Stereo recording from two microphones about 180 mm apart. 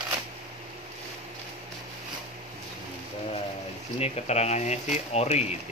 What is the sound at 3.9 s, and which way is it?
Speech, 35° left (ahead or behind).